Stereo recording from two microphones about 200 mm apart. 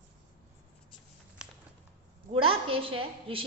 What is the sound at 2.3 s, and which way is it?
A woman's voice, 25° right (ahead or behind).